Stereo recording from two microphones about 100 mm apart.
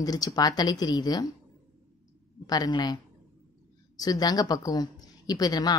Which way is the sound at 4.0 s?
40° left (ahead or behind).